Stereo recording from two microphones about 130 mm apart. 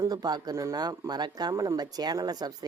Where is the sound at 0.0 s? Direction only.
30° right (ahead or behind).